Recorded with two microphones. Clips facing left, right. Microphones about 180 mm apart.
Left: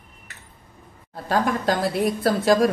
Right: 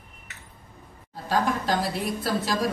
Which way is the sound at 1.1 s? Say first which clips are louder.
Left 3 dB; 55° left (ahead or behind).